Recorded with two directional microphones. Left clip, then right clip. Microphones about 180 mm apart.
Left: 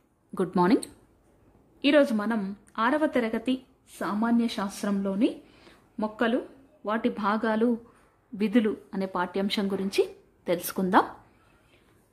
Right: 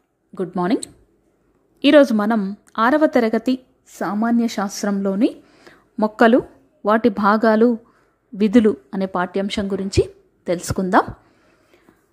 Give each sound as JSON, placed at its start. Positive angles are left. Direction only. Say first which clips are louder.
{"t": 0.3, "sound": "speech", "louder": "right 2 dB", "side_deg": 0}
{"t": 1.8, "sound": "a woman's voice", "louder": "right 9 dB", "side_deg": -30}